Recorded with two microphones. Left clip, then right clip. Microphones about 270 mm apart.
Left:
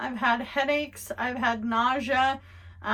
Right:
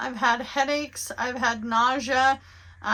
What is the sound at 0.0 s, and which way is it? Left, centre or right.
A woman's voice, centre.